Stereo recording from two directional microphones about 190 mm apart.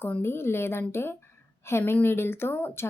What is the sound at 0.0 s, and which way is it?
Speech, 10° left (ahead or behind).